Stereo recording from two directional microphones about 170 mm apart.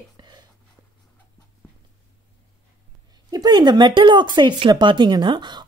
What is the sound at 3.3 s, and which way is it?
Speech, 25° right (ahead or behind).